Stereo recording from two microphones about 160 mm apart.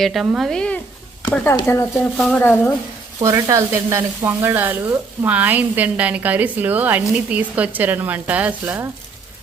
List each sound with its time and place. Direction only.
0.0 s speech: centre (ahead or behind)
3.2 s sizzle: 20° right (ahead or behind)